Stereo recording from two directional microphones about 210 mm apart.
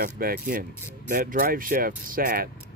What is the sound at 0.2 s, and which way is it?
Speech, 45° right (ahead or behind).